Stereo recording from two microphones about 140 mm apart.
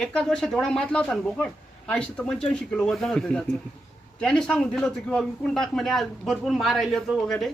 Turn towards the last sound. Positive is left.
turn(degrees=5)  # may be behind; listen again after turning